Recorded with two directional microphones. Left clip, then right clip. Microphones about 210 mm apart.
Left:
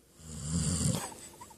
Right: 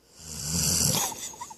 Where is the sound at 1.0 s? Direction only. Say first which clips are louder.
Right 11 dB; 30° right (ahead or behind).